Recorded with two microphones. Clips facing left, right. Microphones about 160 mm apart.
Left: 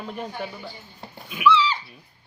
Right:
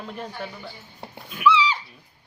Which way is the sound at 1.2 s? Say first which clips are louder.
Even; 10° left (ahead or behind).